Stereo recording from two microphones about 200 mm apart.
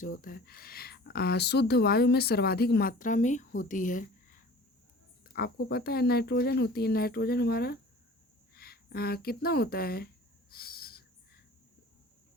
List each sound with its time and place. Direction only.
0.0 s speech: 45° left (ahead or behind)
5.2 s speech: 50° left (ahead or behind)
10.5 s owl: 50° left (ahead or behind)